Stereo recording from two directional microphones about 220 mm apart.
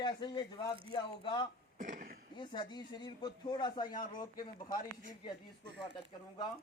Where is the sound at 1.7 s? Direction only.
35° right (ahead or behind).